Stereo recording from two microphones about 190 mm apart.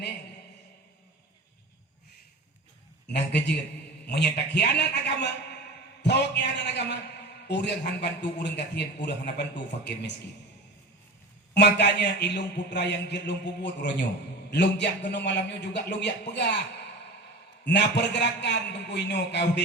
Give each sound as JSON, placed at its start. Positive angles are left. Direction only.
{"t": 4.0, "sound": "a man's voice", "side_deg": 60}
{"t": 11.5, "sound": "a man's voice", "side_deg": 65}
{"t": 17.7, "sound": "a man's voice", "side_deg": 65}